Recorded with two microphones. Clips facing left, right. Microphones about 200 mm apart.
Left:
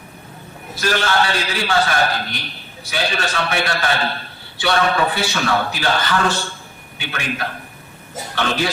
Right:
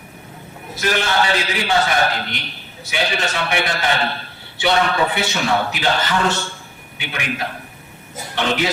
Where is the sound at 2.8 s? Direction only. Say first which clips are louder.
Even; 20° right (ahead or behind).